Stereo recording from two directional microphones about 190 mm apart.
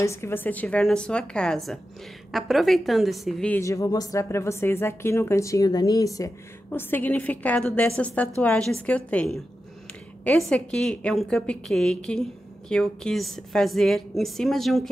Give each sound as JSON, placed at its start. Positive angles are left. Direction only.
{"t": 0.0, "sound": "a woman's voice", "side_deg": 15}